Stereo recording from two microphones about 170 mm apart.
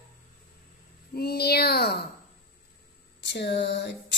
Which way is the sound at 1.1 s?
65° left (ahead or behind).